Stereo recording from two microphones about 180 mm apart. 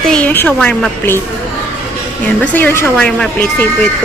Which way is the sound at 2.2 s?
10° left (ahead or behind).